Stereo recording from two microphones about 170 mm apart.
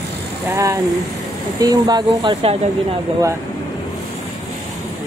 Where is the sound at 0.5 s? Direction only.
15° right (ahead or behind).